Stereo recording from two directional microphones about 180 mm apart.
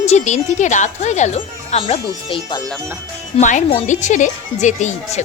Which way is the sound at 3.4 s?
45° left (ahead or behind).